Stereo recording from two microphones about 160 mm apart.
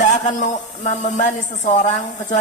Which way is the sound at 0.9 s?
50° left (ahead or behind).